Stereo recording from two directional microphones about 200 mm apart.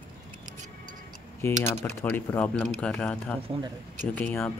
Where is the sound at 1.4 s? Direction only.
10° left (ahead or behind).